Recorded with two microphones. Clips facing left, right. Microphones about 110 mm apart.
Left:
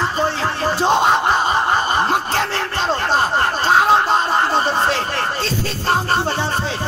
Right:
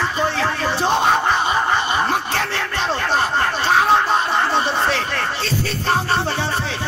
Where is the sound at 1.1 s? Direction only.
25° left (ahead or behind).